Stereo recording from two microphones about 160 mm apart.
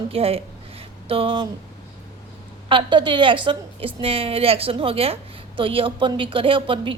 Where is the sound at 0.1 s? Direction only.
35° right (ahead or behind).